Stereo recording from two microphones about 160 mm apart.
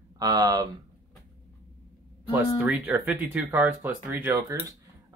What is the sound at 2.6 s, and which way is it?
Speech, 10° right (ahead or behind).